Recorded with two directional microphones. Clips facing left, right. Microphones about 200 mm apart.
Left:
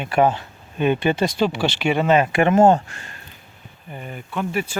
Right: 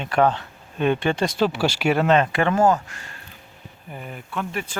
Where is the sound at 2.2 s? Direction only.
15° left (ahead or behind).